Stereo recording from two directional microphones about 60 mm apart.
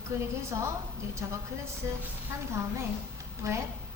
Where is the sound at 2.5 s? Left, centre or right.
Right.